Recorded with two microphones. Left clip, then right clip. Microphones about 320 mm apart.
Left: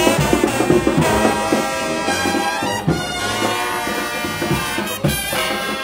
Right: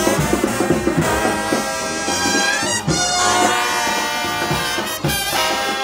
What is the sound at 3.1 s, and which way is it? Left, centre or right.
Bagpipes, right.